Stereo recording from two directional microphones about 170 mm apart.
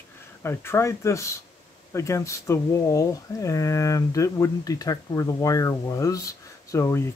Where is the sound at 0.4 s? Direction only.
15° left (ahead or behind).